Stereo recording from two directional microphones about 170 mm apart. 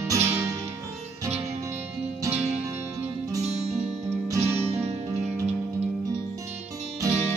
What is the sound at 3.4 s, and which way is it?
Music, 40° right (ahead or behind).